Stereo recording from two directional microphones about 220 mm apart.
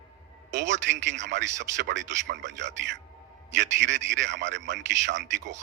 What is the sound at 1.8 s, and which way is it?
A man's voice, 55° right (ahead or behind).